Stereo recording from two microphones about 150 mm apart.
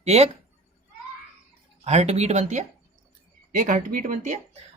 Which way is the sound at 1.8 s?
45° right (ahead or behind).